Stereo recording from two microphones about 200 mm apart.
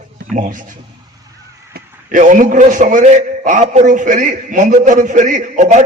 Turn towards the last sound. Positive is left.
turn(degrees=-35)  # may be behind; listen again after turning